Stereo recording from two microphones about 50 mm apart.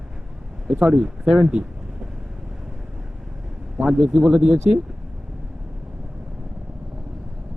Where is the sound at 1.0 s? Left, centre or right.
Centre.